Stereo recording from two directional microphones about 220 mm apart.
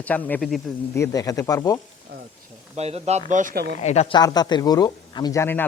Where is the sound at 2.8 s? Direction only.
30° right (ahead or behind); by 3.8 s 45° right (ahead or behind).